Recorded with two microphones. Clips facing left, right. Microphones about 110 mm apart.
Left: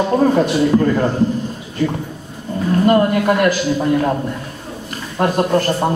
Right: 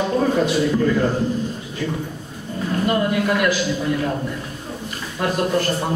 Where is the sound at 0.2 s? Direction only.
45° left (ahead or behind).